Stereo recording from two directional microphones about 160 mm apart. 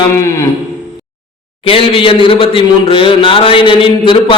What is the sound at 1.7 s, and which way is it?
A man's voice, 35° left (ahead or behind).